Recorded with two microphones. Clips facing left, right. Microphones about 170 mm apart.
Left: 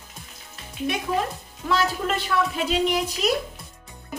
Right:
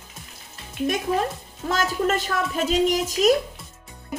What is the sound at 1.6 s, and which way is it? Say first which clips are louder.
A woman's voice: right 1 dB; 45° right (ahead or behind).